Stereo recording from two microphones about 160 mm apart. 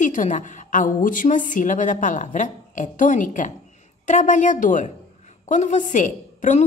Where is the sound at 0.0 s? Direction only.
55° left (ahead or behind).